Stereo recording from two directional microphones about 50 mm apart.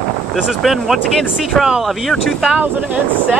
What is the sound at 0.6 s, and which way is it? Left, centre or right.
Speech, centre.